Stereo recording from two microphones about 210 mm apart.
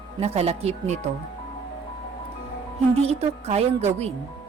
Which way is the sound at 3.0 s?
30° right (ahead or behind).